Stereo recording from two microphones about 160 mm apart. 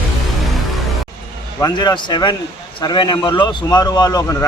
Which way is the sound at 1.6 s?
25° left (ahead or behind).